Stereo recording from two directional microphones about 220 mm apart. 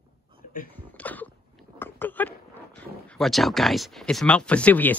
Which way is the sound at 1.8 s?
10° left (ahead or behind).